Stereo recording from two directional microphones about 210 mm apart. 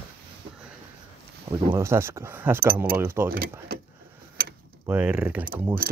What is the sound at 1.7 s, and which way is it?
Speech, 10° right (ahead or behind).